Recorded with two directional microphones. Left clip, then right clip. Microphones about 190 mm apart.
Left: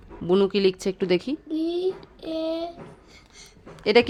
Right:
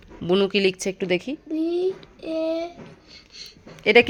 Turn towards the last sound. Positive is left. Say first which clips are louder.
# right 3 dB
turn(degrees=10)  # may be behind; listen again after turning